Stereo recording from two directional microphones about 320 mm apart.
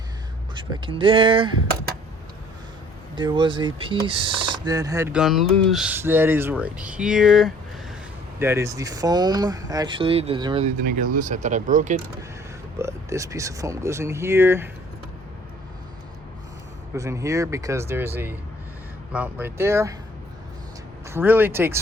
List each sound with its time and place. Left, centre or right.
0.5 s speech: centre
3.2 s speech: centre
12.8 s speech: centre
16.9 s speech: centre
21.1 s speech: centre